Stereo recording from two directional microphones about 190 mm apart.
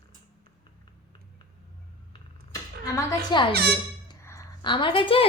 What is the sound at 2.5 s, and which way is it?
Speech, 15° left (ahead or behind).